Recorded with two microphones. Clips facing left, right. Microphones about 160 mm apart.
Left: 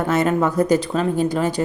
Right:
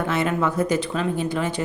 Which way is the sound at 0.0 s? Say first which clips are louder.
Left 4 dB; 40° left (ahead or behind).